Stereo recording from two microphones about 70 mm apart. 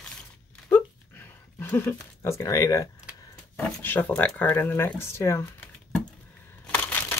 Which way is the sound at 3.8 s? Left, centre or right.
Left.